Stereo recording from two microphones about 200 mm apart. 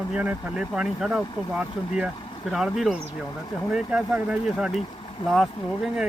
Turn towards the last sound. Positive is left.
turn(degrees=0)  # may be behind; listen again after turning